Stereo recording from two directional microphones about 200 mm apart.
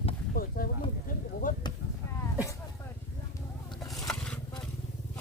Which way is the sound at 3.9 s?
5° left (ahead or behind).